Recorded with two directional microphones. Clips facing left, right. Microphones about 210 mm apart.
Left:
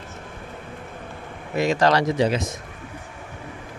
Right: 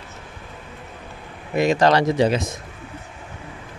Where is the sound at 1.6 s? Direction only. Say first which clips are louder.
Right 2 dB; 20° right (ahead or behind).